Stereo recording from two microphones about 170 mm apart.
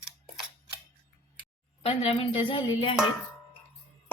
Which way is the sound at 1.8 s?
35° left (ahead or behind).